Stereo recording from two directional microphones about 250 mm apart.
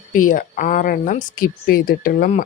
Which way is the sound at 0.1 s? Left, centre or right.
Left.